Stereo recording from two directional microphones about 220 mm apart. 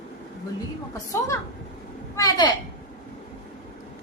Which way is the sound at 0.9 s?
15° left (ahead or behind).